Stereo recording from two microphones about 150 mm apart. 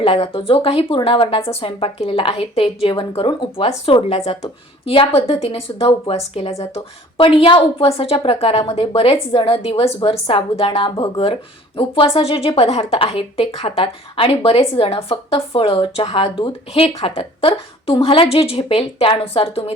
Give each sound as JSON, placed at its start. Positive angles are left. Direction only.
{"t": 0.0, "sound": "speech", "side_deg": 40}